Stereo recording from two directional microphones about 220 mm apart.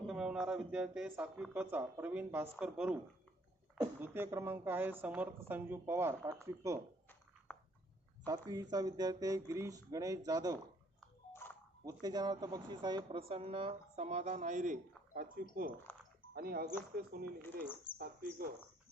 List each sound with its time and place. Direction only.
0.1 s a woman's voice: 5° right (ahead or behind)
8.3 s a woman's voice: 15° right (ahead or behind)
11.0 s a sound: 10° left (ahead or behind)
11.9 s speech: 15° right (ahead or behind); by 15.4 s 40° right (ahead or behind)
15.9 s a sound: 5° left (ahead or behind)
16.3 s speech: 45° right (ahead or behind)